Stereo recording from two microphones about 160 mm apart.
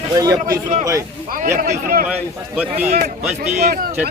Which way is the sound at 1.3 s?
55° right (ahead or behind).